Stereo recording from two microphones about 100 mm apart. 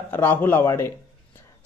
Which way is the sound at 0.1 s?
20° left (ahead or behind).